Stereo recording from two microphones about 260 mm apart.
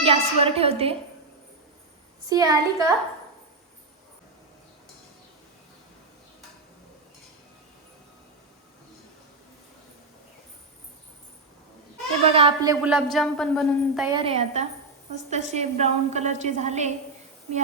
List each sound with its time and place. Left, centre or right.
0.0 s a woman's voice: right
2.3 s a woman's voice: centre
12.2 s a woman's voice: right
12.8 s speech: centre
14.1 s a woman's voice: right